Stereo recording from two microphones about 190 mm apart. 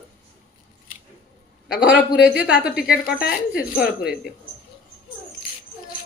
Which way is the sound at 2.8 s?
55° left (ahead or behind).